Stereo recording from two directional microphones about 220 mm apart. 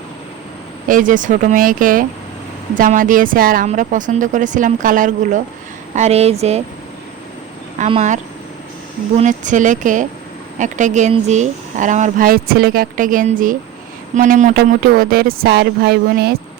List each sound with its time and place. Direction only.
0.9 s a woman's voice: 35° right (ahead or behind)
7.8 s speech: 30° right (ahead or behind); by 16.3 s 45° right (ahead or behind)